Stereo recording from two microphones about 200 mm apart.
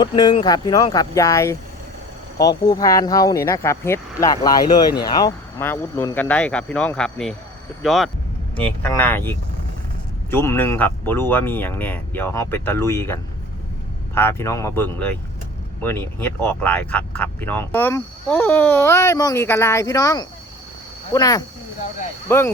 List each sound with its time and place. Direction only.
0.0 s speech: 20° left (ahead or behind)
10.3 s speech: 10° left (ahead or behind)
14.2 s speech: 10° left (ahead or behind)